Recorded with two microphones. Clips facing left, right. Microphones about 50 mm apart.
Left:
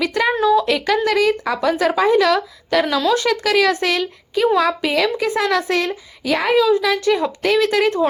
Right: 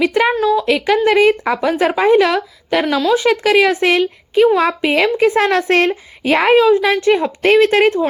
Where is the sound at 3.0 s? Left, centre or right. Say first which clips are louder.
Right 3 dB; centre.